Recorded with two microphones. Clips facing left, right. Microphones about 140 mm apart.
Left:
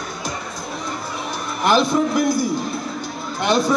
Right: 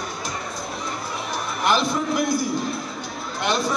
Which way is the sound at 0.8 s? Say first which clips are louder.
Left 3 dB; centre (ahead or behind).